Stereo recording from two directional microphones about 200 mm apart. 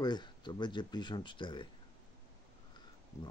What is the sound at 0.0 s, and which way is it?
Speech, 20° left (ahead or behind).